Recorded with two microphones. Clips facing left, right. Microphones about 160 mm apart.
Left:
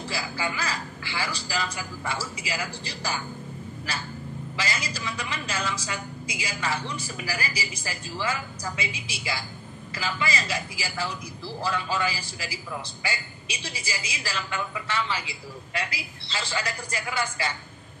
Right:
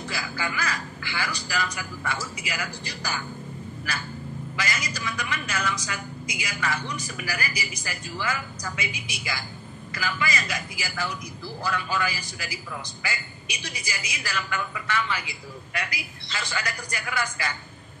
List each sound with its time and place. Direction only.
0.1 s a man's voice: 30° left (ahead or behind)